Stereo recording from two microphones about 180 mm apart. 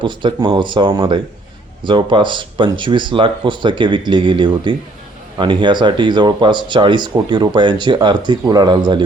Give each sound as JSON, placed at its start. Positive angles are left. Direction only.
{"t": 0.0, "sound": "speech", "side_deg": -25}